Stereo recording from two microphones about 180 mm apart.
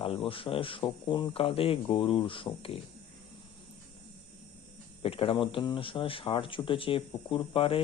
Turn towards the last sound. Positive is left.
turn(degrees=30)  # may be behind; listen again after turning